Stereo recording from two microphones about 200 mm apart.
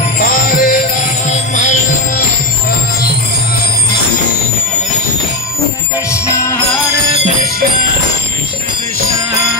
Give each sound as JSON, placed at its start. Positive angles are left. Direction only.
{"t": 0.2, "sound": "music", "side_deg": 45}